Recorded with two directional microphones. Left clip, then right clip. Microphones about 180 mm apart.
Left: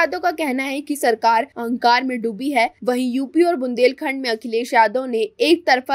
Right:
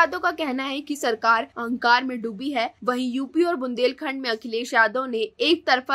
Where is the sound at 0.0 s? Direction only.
15° left (ahead or behind).